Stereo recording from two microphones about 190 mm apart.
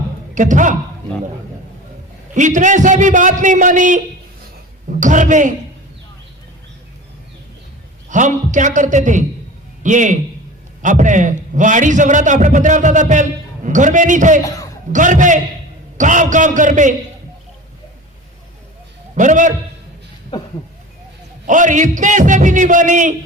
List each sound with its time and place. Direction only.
0.3 s a man's voice: 40° right (ahead or behind)
2.3 s a man's voice: 40° right (ahead or behind)
8.1 s a man's voice: 40° right (ahead or behind)
14.4 s a man's voice: 15° left (ahead or behind)
14.9 s a man's voice: 40° right (ahead or behind)
19.1 s a man's voice: 40° right (ahead or behind)
21.4 s a man's voice: 40° right (ahead or behind)